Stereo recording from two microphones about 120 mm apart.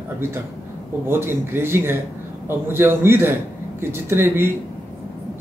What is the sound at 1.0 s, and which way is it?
A man's voice, 20° right (ahead or behind).